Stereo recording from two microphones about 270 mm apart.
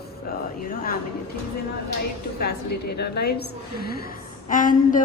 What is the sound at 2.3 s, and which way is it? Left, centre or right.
A woman's voice, left.